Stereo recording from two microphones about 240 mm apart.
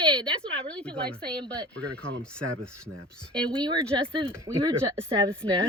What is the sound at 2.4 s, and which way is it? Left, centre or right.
Speech, right.